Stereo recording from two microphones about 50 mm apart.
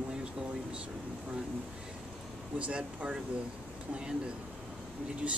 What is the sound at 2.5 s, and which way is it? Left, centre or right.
Speech, right.